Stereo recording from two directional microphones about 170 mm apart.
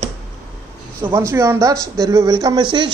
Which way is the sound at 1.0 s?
15° right (ahead or behind).